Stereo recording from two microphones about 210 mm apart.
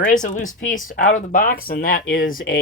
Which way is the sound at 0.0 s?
40° left (ahead or behind).